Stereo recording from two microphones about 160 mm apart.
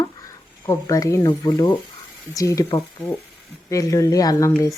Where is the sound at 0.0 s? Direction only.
20° left (ahead or behind).